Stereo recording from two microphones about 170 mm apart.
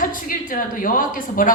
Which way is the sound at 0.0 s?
55° left (ahead or behind).